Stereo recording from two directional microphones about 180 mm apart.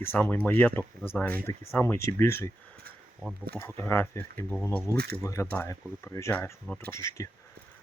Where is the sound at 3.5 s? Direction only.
15° left (ahead or behind).